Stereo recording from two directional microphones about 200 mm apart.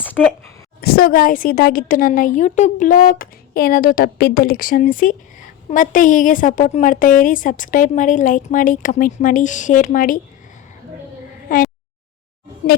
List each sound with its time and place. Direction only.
0.2 s speech: centre (ahead or behind)
0.8 s a woman's voice: 50° left (ahead or behind)
11.4 s a sound: 45° left (ahead or behind)